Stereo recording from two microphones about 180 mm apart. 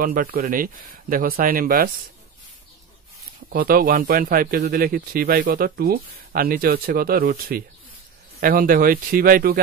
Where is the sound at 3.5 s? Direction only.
55° right (ahead or behind).